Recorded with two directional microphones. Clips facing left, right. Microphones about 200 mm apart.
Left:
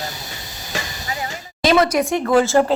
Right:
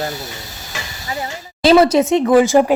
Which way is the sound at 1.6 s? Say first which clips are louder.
Right 5 dB; 30° right (ahead or behind).